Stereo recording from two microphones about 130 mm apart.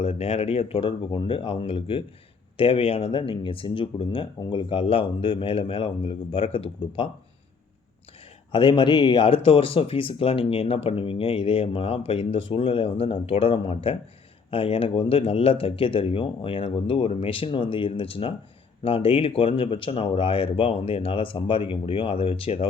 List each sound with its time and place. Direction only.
0.0 s speech: 50° left (ahead or behind)
8.5 s speech: 40° left (ahead or behind)